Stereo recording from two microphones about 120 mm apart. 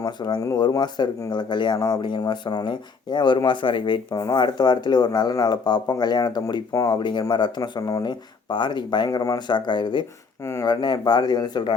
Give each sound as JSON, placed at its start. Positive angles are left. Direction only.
{"t": 0.0, "sound": "speech", "side_deg": 35}
{"t": 10.4, "sound": "speech", "side_deg": 25}
{"t": 10.7, "sound": "speech", "side_deg": 40}